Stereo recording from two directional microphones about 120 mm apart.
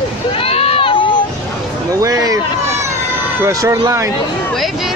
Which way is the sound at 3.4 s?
25° right (ahead or behind).